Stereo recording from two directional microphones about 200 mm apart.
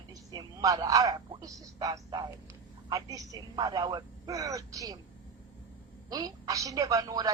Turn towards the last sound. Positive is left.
turn(degrees=-20)  # may be behind; listen again after turning